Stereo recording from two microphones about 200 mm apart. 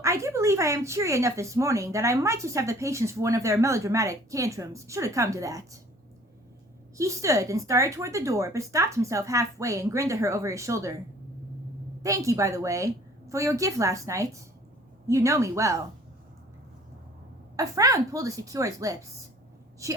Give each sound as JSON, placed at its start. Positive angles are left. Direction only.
{"t": 0.0, "sound": "speech", "side_deg": -15}
{"t": 6.9, "sound": "speech", "side_deg": -15}
{"t": 12.0, "sound": "speech", "side_deg": -15}
{"t": 17.6, "sound": "speech", "side_deg": -15}